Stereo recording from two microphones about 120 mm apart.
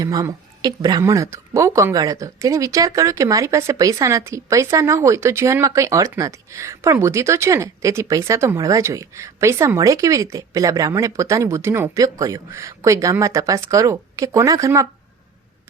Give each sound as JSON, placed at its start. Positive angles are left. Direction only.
{"t": 0.0, "sound": "speech", "side_deg": -30}